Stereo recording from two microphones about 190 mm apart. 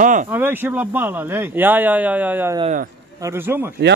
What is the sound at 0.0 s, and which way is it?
Speech, 40° right (ahead or behind).